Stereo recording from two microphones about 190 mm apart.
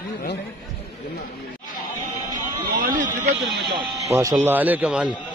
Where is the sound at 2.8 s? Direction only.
45° right (ahead or behind).